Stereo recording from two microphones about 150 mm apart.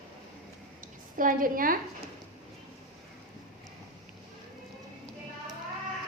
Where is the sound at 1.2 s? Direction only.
65° right (ahead or behind).